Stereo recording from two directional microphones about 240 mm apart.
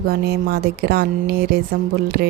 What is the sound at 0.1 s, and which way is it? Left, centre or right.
A woman's voice, right.